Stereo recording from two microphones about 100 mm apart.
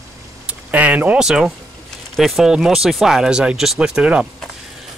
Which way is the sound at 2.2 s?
Centre (ahead or behind).